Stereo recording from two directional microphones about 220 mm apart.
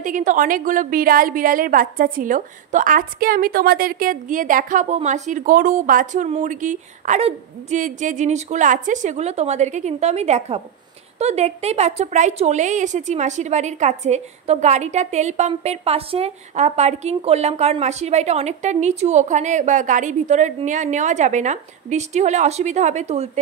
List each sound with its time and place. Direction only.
0.0 s a woman's voice: 35° right (ahead or behind)